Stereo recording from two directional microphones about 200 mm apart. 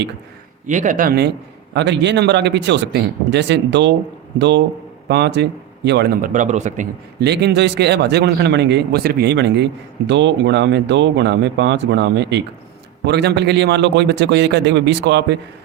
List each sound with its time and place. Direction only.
0.7 s speech: 40° right (ahead or behind)
1.7 s a man's voice: 60° right (ahead or behind); by 6.8 s 35° right (ahead or behind)
7.2 s a man's voice: 55° right (ahead or behind)